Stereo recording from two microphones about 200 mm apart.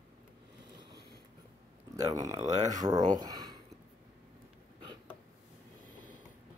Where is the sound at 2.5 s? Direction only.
35° right (ahead or behind).